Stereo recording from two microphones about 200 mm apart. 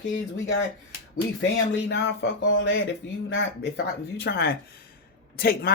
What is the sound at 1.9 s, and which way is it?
Speech, 60° left (ahead or behind).